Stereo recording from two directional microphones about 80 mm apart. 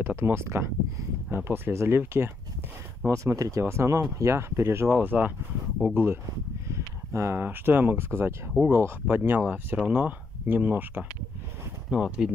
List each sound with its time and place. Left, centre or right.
0.0 s speech: right
3.1 s speech: right
6.7 s speech: right; by 12.3 s centre